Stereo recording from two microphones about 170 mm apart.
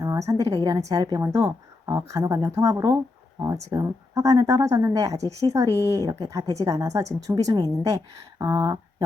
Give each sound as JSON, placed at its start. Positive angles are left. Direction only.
{"t": 0.0, "sound": "a woman's voice", "side_deg": -20}